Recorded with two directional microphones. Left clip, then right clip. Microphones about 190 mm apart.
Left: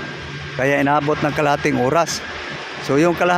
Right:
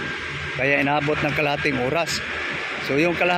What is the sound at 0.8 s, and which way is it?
Speech, 20° left (ahead or behind).